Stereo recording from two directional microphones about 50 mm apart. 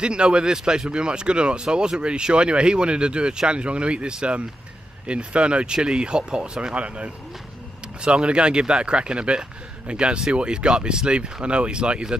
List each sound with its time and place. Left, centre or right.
0.0 s speech: centre